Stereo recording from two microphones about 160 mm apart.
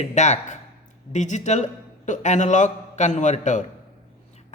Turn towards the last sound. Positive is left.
turn(degrees=50)  # may be behind; listen again after turning